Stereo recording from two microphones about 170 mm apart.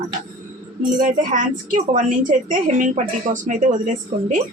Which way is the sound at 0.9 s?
50° right (ahead or behind).